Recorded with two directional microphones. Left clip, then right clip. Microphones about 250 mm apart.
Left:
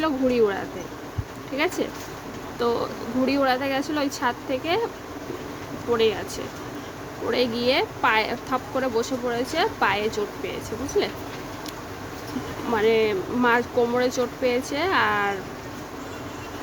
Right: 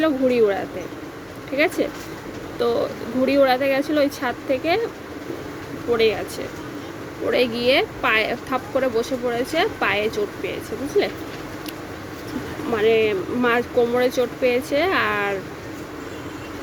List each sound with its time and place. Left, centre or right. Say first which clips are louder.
0.0 s speech: right 3 dB; centre
1.5 s speech: right 5 dB; centre
7.3 s speech: right 4 dB; centre
12.7 s speech: right 2 dB; centre